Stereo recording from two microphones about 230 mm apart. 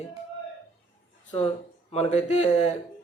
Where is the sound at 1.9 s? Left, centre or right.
Left.